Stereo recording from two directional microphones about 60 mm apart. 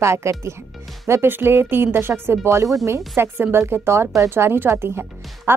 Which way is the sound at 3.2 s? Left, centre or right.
Right.